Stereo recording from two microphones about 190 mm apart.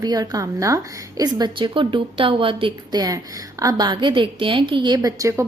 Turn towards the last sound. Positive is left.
turn(degrees=-15)  # may be behind; listen again after turning